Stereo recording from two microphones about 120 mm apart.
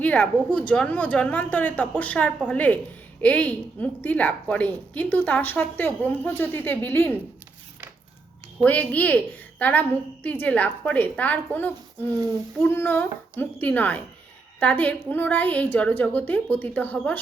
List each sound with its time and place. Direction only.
0.0 s a woman's voice: 10° left (ahead or behind)
8.6 s a woman's voice: 15° left (ahead or behind)